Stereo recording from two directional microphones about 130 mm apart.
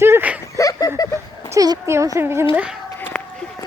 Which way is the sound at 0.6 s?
25° left (ahead or behind).